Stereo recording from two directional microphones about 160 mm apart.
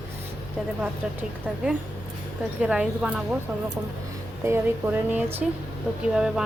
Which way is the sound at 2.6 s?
5° right (ahead or behind).